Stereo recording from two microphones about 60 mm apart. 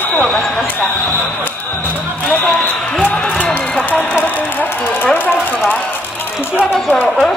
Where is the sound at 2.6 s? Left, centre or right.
Left.